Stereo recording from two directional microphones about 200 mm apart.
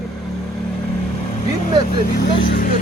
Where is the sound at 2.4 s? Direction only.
45° left (ahead or behind).